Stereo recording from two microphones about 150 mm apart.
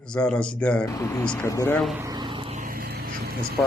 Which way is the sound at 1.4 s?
15° left (ahead or behind).